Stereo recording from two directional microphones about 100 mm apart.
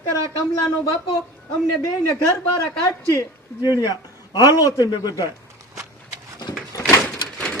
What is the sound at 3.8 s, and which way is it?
A man's voice, 40° left (ahead or behind).